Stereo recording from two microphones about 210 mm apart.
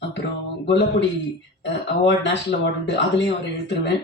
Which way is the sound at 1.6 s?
55° left (ahead or behind).